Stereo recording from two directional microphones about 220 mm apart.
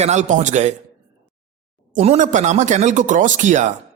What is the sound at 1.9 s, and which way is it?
Speech, 30° right (ahead or behind).